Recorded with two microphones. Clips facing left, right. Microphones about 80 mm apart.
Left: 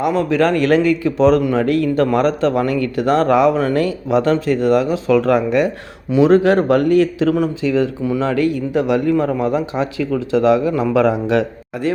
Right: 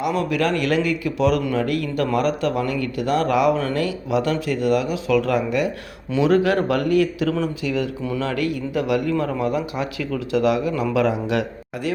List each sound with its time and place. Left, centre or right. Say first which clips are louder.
0.0 s speech: left 6 dB; left
6.1 s speech: left 6 dB; left